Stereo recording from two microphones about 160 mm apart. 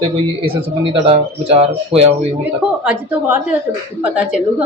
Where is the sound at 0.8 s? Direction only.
35° right (ahead or behind).